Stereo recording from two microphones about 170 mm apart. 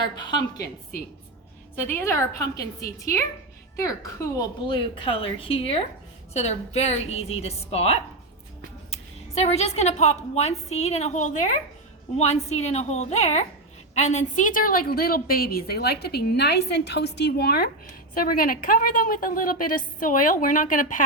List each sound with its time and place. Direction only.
0.2 s a woman's voice: 25° left (ahead or behind)
0.5 s a woman's voice: 70° left (ahead or behind)
1.8 s a woman's voice: 15° left (ahead or behind); by 21.0 s 50° left (ahead or behind)